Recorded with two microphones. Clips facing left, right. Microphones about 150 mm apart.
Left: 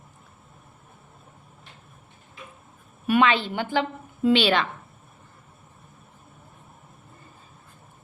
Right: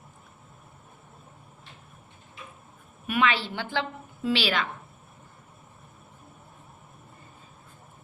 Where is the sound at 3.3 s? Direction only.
15° left (ahead or behind).